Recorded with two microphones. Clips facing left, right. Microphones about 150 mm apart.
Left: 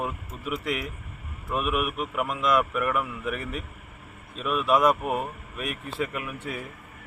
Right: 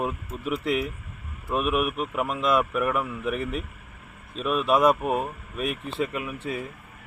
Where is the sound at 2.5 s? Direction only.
Centre (ahead or behind).